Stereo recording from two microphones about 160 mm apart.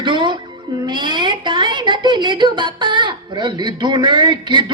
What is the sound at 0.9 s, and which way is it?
A woman's voice, 30° right (ahead or behind).